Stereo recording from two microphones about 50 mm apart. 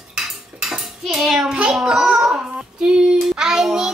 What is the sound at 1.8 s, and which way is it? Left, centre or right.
Child singing, centre.